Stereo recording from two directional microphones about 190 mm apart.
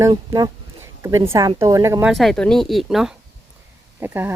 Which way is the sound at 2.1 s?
Centre (ahead or behind).